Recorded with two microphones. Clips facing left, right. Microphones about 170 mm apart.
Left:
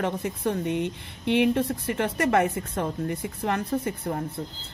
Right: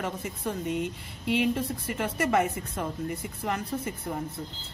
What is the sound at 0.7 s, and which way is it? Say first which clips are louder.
Speech: left 3 dB; 20° left (ahead or behind).